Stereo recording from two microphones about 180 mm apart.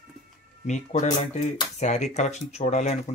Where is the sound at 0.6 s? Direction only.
40° left (ahead or behind).